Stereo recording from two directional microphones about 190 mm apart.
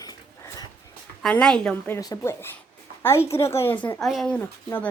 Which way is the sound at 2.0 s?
15° left (ahead or behind).